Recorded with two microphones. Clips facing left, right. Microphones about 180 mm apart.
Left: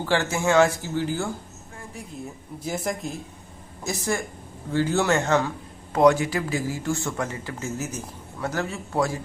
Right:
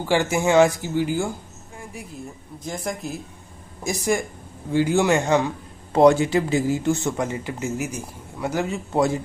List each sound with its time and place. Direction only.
0.0 s speech: 15° right (ahead or behind)
2.6 s speech: 5° left (ahead or behind)
3.8 s speech: 15° right (ahead or behind)
5.9 s speech: 30° right (ahead or behind)